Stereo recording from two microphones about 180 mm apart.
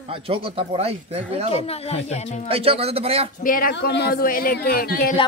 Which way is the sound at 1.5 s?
35° left (ahead or behind).